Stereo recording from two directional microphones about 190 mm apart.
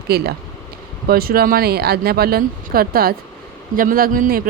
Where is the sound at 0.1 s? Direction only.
55° right (ahead or behind).